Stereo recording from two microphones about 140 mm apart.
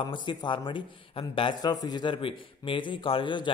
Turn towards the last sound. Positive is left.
turn(degrees=35)  # may be behind; listen again after turning